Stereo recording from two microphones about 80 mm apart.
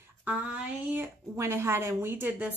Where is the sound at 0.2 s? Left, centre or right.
Centre.